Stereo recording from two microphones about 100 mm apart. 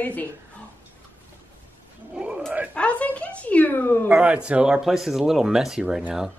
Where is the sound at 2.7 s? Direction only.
15° left (ahead or behind).